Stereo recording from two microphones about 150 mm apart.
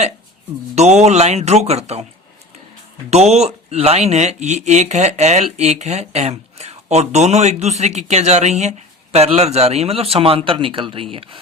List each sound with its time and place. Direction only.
0.8 s speech: 45° right (ahead or behind)
3.1 s a man's voice: 45° right (ahead or behind)